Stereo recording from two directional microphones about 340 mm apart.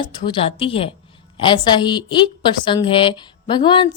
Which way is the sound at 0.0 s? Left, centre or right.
Centre.